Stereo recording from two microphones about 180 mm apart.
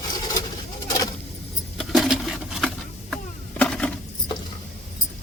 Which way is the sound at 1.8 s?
Centre (ahead or behind).